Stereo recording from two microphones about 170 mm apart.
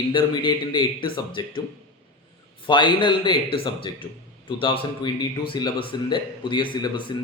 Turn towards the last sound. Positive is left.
turn(degrees=30)  # may be behind; listen again after turning